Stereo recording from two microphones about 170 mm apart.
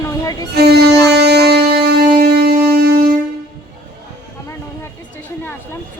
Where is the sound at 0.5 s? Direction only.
70° right (ahead or behind).